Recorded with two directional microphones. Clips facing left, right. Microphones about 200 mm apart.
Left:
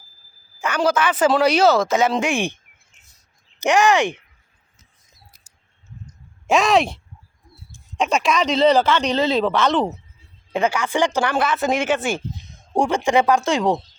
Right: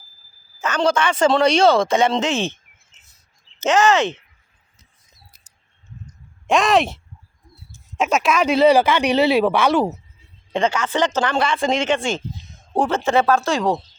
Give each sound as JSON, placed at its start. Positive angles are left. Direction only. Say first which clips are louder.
{"t": 0.6, "sound": "speech", "louder": "even", "side_deg": 10}
{"t": 3.6, "sound": "speech", "louder": "even", "side_deg": 15}
{"t": 6.5, "sound": "speech", "louder": "even", "side_deg": 0}
{"t": 10.5, "sound": "speech", "louder": "even", "side_deg": 10}